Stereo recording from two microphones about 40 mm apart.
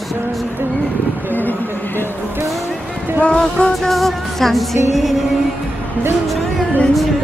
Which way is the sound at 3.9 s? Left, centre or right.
Centre.